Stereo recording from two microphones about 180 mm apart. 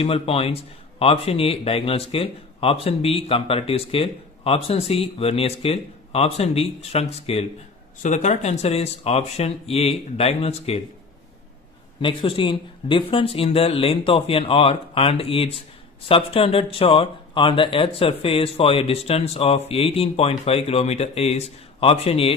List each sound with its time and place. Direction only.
0.0 s speech: 35° left (ahead or behind)
12.0 s speech: 30° left (ahead or behind)